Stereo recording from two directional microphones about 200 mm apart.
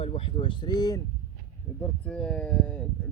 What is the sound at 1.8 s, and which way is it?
Speech, 5° left (ahead or behind).